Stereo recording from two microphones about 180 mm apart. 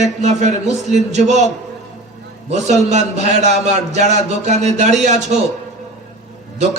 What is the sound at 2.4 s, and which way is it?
A man's voice, 40° right (ahead or behind).